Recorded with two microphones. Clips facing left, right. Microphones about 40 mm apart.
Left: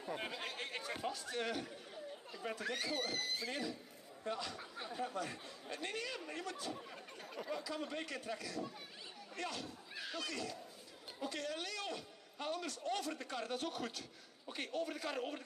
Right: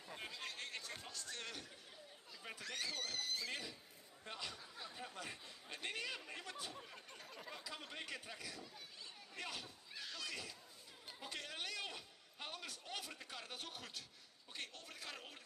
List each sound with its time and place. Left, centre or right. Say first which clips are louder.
0.0 s chatter: left 7 dB; left
1.1 s a man's voice: left 9 dB; centre
4.3 s a man's voice: left 7 dB; centre
6.7 s chatter: left 6 dB; centre
7.4 s a man's voice: left 10 dB; centre
9.9 s speech: left 5 dB; centre
10.3 s a man's voice: left 6 dB; centre
14.5 s a man's voice: left 11 dB; centre